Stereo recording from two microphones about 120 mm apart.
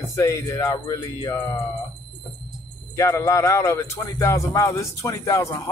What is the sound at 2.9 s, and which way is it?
Speech, 30° left (ahead or behind).